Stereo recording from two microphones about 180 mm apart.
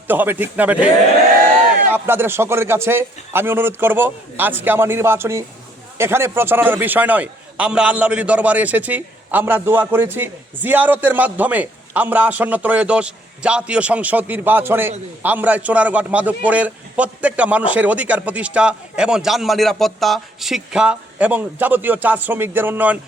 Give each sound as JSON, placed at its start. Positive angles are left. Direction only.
{"t": 0.1, "sound": "a man's voice", "side_deg": -10}
{"t": 1.9, "sound": "a man's voice", "side_deg": -10}